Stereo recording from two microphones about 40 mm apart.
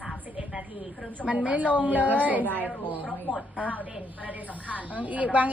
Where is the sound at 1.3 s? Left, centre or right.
Right.